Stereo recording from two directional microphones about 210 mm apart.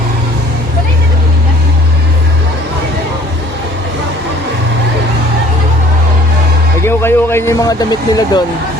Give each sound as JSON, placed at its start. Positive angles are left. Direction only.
{"t": 6.8, "sound": "speech", "side_deg": 10}